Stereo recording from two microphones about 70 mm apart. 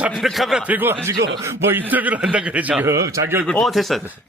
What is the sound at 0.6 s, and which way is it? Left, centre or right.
A man's voice, right.